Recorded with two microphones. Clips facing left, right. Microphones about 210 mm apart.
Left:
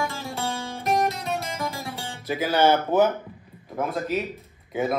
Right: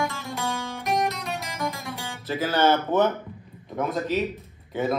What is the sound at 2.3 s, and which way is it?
A man's voice, 15° left (ahead or behind).